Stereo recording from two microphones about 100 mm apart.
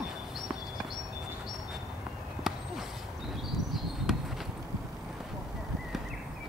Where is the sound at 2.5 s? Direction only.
5° right (ahead or behind).